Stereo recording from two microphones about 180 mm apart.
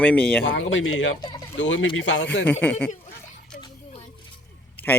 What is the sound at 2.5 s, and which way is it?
Speech, 10° left (ahead or behind).